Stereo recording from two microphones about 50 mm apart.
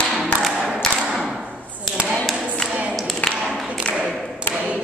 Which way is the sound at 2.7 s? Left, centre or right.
Right.